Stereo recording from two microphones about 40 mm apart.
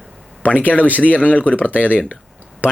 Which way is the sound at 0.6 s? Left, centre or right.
Left.